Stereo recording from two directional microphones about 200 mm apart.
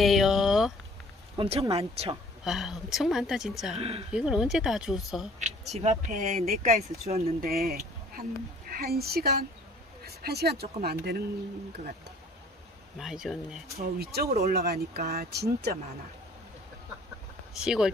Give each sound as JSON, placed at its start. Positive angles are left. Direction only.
{"t": 0.0, "sound": "a sound", "side_deg": 0}
{"t": 1.3, "sound": "speech", "side_deg": -30}
{"t": 2.4, "sound": "a woman's voice", "side_deg": 0}
{"t": 3.7, "sound": "speech", "side_deg": -30}
{"t": 4.1, "sound": "a woman's voice", "side_deg": -5}
{"t": 5.7, "sound": "speech", "side_deg": -35}
{"t": 7.3, "sound": "speech", "side_deg": -50}
{"t": 13.0, "sound": "a woman's voice", "side_deg": 0}
{"t": 13.7, "sound": "speech", "side_deg": -50}
{"t": 17.6, "sound": "a woman's voice", "side_deg": -5}